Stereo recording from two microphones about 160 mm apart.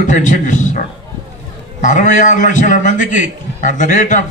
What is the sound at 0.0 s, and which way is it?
A man's voice, 50° left (ahead or behind).